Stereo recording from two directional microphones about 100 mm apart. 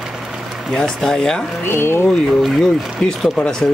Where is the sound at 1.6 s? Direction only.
25° left (ahead or behind).